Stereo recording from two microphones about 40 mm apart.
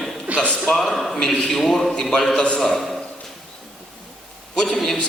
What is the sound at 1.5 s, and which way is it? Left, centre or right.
A man's voice, centre.